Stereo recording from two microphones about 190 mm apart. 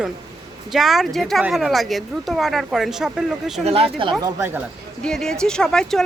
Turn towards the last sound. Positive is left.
turn(degrees=5)  # may be behind; listen again after turning